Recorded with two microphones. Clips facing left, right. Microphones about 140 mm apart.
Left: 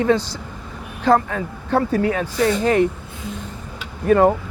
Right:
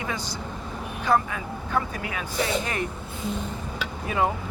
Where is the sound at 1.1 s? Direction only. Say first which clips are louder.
Left 4 dB; 50° left (ahead or behind).